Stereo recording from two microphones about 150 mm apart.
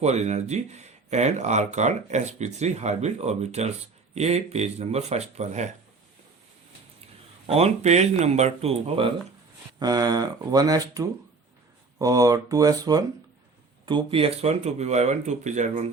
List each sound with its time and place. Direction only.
0.0 s speech: 45° right (ahead or behind)
7.5 s speech: 45° right (ahead or behind)
9.7 s speech: 25° right (ahead or behind); by 15.9 s 50° right (ahead or behind)